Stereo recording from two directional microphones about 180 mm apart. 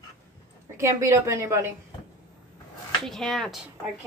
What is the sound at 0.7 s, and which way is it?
A woman's voice, 15° right (ahead or behind).